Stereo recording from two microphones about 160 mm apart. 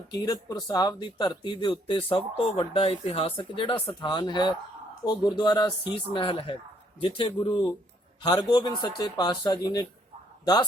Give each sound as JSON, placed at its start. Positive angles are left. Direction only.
{"t": 0.1, "sound": "speech", "side_deg": 25}